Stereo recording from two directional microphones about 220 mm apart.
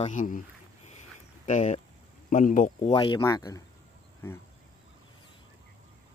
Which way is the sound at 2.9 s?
25° left (ahead or behind).